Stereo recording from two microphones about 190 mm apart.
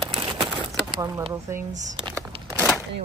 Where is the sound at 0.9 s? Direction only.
25° right (ahead or behind).